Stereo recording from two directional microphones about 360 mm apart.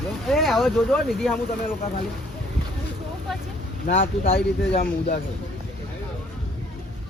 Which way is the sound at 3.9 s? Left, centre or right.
Left.